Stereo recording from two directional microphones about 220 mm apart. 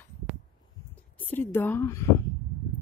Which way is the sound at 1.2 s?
10° left (ahead or behind).